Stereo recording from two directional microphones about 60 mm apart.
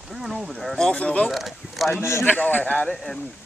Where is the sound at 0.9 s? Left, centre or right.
Centre.